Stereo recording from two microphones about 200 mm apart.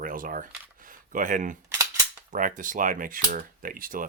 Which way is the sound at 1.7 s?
20° right (ahead or behind).